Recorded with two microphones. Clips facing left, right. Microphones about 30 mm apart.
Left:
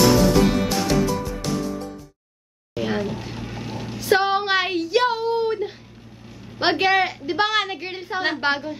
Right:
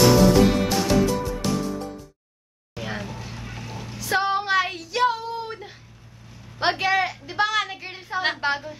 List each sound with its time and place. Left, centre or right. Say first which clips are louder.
0.0 s music: even; centre
2.7 s a sound: left 7 dB; centre
6.6 s a woman's voice: left 3 dB; left